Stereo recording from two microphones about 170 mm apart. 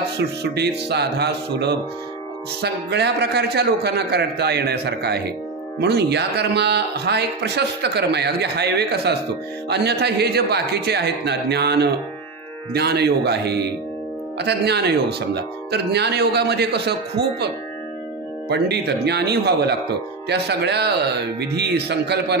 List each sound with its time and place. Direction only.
0.2 s speech: 75° right (ahead or behind)
18.5 s speech: 80° right